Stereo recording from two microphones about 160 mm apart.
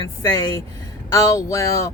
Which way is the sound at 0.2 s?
20° left (ahead or behind).